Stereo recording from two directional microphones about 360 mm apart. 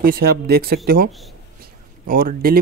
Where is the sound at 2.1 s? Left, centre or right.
Right.